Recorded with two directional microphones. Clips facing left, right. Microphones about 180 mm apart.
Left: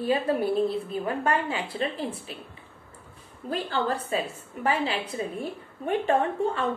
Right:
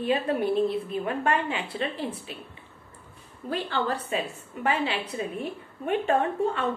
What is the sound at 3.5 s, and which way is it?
A woman's voice, 40° left (ahead or behind).